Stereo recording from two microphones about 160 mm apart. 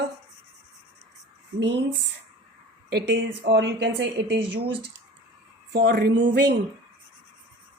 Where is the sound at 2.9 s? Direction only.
90° right.